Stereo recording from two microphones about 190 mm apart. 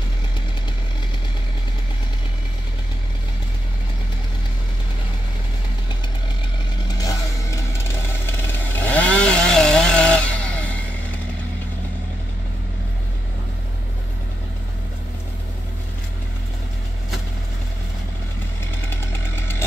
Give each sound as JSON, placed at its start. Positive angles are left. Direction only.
{"t": 8.5, "sound": "chainsaw", "side_deg": 10}
{"t": 18.9, "sound": "chainsaw", "side_deg": 10}